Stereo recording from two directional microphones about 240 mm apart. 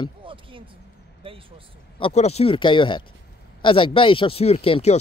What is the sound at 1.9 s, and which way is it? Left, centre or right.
Speech, left.